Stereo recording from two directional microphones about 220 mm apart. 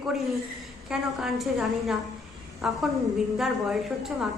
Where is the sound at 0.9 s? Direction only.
Centre (ahead or behind).